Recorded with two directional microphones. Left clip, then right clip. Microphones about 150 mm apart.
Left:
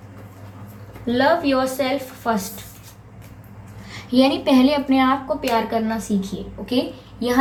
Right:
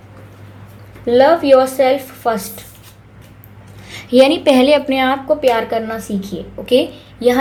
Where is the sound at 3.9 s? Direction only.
45° right (ahead or behind).